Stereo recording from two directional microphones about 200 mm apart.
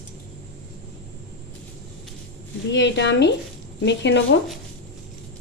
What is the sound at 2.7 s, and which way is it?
A woman's voice, 60° left (ahead or behind).